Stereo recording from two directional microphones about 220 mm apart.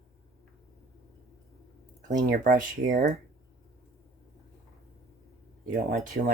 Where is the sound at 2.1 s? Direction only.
35° right (ahead or behind).